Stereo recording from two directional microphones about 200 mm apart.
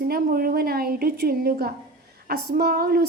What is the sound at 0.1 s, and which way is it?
A woman's voice, 45° right (ahead or behind).